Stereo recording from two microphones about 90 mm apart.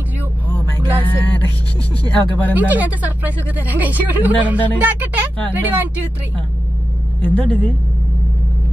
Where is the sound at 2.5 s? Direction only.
20° right (ahead or behind).